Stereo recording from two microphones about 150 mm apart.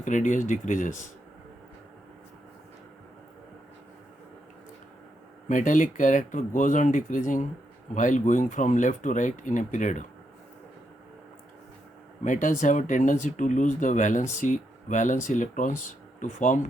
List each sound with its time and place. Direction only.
0.0 s speech: 55° left (ahead or behind)
5.5 s speech: 60° left (ahead or behind)
12.2 s speech: 55° left (ahead or behind)